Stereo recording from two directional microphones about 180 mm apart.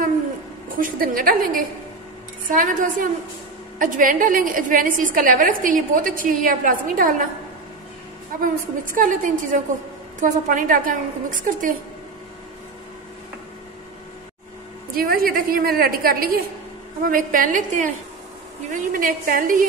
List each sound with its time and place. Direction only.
0.7 s a woman's voice: 50° right (ahead or behind)
8.4 s a woman's voice: 50° right (ahead or behind)
15.0 s a woman's voice: 55° right (ahead or behind)